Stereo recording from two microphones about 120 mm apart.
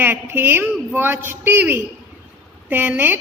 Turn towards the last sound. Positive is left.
turn(degrees=-15)  # may be behind; listen again after turning